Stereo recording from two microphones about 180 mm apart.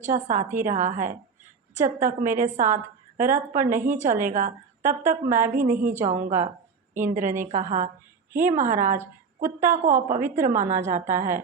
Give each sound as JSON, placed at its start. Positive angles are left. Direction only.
{"t": 0.0, "sound": "a woman's voice", "side_deg": -45}
{"t": 10.2, "sound": "a woman's voice", "side_deg": -15}
{"t": 10.4, "sound": "a woman's voice", "side_deg": -45}